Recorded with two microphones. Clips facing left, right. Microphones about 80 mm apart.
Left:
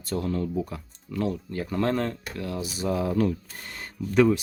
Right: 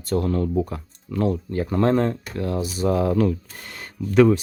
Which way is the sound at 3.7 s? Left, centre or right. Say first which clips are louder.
Right 4 dB; right.